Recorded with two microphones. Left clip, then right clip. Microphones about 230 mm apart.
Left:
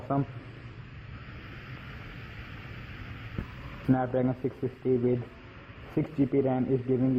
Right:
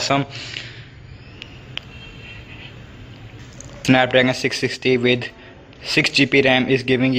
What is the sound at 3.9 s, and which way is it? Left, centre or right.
Speech, right.